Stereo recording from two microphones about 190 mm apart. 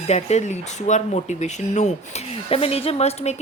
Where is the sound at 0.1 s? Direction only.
35° left (ahead or behind).